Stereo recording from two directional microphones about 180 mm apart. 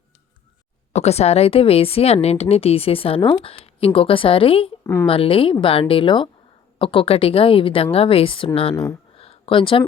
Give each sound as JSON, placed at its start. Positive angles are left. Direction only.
{"t": 0.9, "sound": "a woman's voice", "side_deg": 35}
{"t": 4.8, "sound": "speech", "side_deg": 15}
{"t": 5.0, "sound": "a woman's voice", "side_deg": 30}
{"t": 8.7, "sound": "speech", "side_deg": 15}
{"t": 9.1, "sound": "a sound", "side_deg": 35}